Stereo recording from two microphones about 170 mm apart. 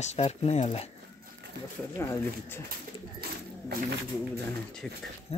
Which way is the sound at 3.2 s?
65° right (ahead or behind).